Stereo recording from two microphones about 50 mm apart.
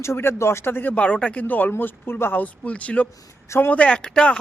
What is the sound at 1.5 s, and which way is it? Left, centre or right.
Speech, left.